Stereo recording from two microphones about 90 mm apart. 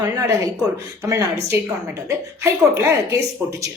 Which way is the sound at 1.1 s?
35° right (ahead or behind).